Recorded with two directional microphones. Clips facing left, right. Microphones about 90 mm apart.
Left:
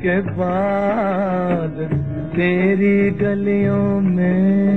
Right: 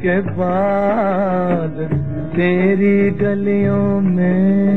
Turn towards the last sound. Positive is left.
turn(degrees=-25)  # may be behind; listen again after turning